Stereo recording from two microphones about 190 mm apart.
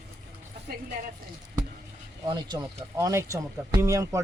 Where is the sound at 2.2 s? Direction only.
20° right (ahead or behind).